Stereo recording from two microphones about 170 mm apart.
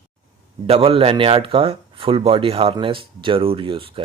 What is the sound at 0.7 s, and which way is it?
Speech, 35° right (ahead or behind).